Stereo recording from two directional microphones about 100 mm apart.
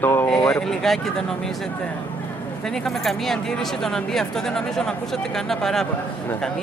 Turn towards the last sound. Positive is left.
turn(degrees=5)  # may be behind; listen again after turning